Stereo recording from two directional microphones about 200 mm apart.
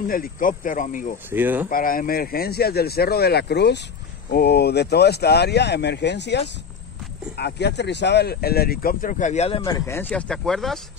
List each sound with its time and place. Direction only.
0.1 s speech: 45° left (ahead or behind)
1.3 s speech: 10° right (ahead or behind)
1.7 s speech: 45° left (ahead or behind)
9.6 s speech: 15° left (ahead or behind)